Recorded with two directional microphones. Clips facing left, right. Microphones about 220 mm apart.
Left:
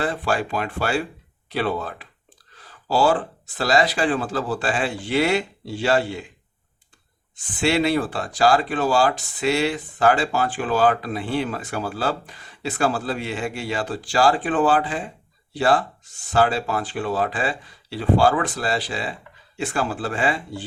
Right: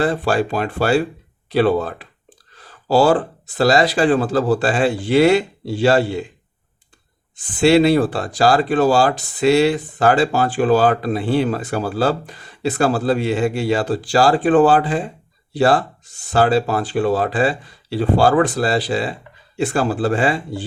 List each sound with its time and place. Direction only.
0.0 s speech: 35° right (ahead or behind)
7.6 s speech: 35° right (ahead or behind)